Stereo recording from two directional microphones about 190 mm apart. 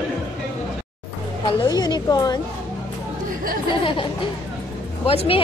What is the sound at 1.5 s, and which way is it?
Speech, 20° left (ahead or behind).